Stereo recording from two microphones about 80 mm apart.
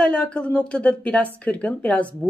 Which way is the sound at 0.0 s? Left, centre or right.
Centre.